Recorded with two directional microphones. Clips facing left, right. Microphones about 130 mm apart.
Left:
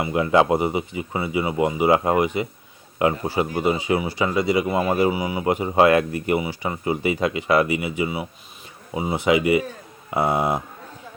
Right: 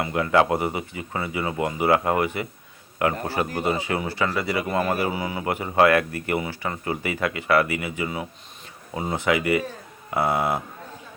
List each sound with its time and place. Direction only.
0.0 s speech: 20° left (ahead or behind)